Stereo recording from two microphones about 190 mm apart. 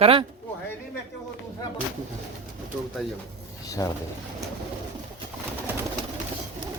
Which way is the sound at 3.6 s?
15° left (ahead or behind).